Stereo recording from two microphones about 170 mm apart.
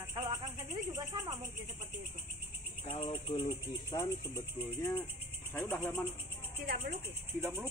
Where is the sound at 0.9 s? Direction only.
20° right (ahead or behind).